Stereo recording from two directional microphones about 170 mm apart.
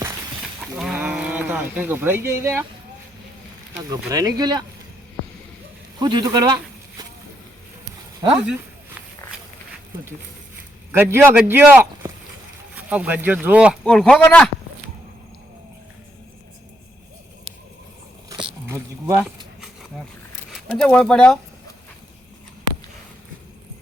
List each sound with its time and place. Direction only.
0.8 s speech: 5° right (ahead or behind)
3.8 s speech: 20° right (ahead or behind)
6.0 s speech: 25° right (ahead or behind)
10.9 s speech: 15° right (ahead or behind)
13.8 s speech: 5° left (ahead or behind)
18.3 s a sound: 30° right (ahead or behind)
18.7 s a sound: 15° right (ahead or behind)
20.7 s speech: 5° left (ahead or behind)